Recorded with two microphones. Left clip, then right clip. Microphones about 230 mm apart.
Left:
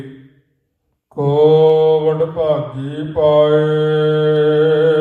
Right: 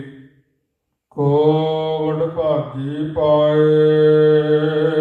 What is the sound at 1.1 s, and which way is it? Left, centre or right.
Mantra, left.